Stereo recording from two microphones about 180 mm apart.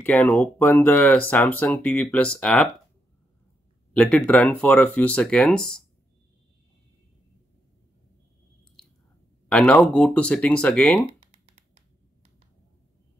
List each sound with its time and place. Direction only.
0.0 s speech: 10° left (ahead or behind)
3.9 s speech: 5° left (ahead or behind)
9.5 s speech: 5° left (ahead or behind)
11.1 s typing: 35° right (ahead or behind)